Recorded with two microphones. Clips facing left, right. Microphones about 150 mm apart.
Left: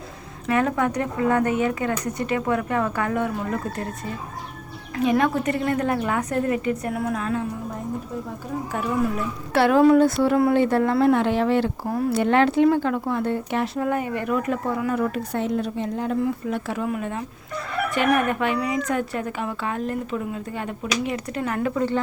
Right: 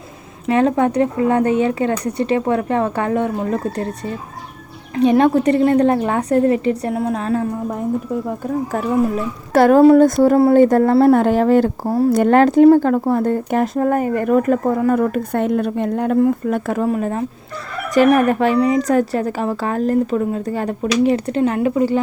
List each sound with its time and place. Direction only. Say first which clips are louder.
0.4 s speech: right 6 dB; 25° right (ahead or behind)
4.9 s speech: right 7 dB; 30° right (ahead or behind)
9.5 s speech: right 6 dB; 45° right (ahead or behind); by 21.9 s 15° right (ahead or behind)